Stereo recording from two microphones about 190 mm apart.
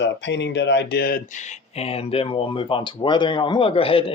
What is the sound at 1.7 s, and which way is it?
Speech, 30° left (ahead or behind).